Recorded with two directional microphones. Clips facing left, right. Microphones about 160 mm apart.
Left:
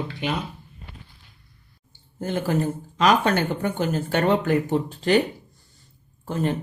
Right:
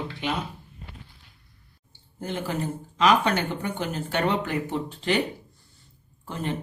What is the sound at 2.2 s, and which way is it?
Speech, 45° left (ahead or behind).